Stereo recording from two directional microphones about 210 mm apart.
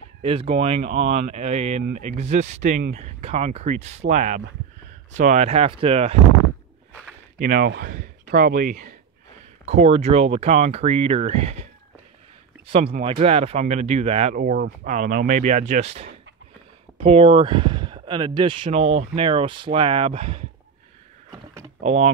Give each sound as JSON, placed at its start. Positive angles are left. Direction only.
{"t": 0.2, "sound": "speech", "side_deg": -25}
{"t": 7.3, "sound": "speech", "side_deg": -40}
{"t": 9.7, "sound": "speech", "side_deg": -30}
{"t": 12.6, "sound": "speech", "side_deg": -25}
{"t": 14.3, "sound": "speech", "side_deg": -40}
{"t": 21.8, "sound": "speech", "side_deg": -30}